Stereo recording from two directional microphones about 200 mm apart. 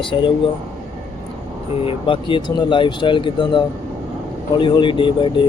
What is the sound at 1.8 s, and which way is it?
Speech, 25° left (ahead or behind).